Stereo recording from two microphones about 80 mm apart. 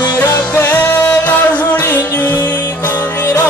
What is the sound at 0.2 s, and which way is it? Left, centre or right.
Music, left.